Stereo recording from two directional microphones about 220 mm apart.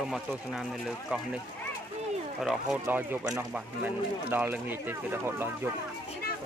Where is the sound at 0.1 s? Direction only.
Centre (ahead or behind).